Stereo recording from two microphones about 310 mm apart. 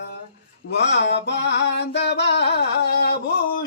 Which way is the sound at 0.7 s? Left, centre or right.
Left.